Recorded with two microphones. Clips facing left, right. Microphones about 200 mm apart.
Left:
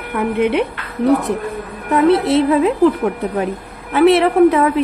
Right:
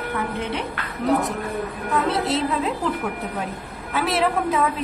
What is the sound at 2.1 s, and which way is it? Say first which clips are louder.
A woman's voice: left 9 dB; 60° left (ahead or behind).